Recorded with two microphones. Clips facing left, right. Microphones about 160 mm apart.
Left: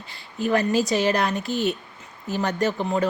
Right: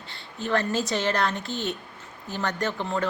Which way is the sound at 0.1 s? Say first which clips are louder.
Left 7 dB; 25° right (ahead or behind).